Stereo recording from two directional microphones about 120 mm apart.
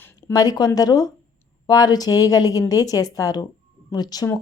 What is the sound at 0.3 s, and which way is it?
A woman's voice, 35° left (ahead or behind).